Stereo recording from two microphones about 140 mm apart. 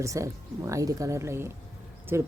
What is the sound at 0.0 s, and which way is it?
Speech, 20° right (ahead or behind).